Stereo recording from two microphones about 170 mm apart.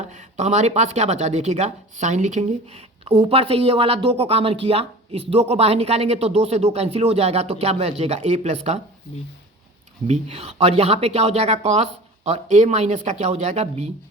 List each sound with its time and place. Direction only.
0.0 s speech: 40° right (ahead or behind)
10.1 s speech: 40° right (ahead or behind)